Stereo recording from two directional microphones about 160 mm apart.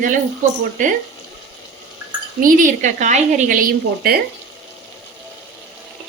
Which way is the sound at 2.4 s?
55° right (ahead or behind).